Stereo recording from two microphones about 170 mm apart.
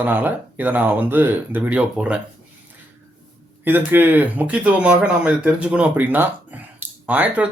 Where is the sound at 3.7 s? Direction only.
10° right (ahead or behind).